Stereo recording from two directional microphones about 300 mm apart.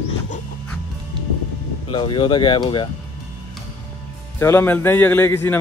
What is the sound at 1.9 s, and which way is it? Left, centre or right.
Speech, centre.